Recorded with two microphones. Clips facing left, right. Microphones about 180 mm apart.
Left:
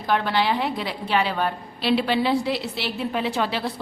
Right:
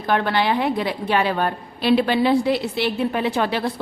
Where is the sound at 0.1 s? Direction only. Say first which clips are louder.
Right 2 dB; 55° right (ahead or behind).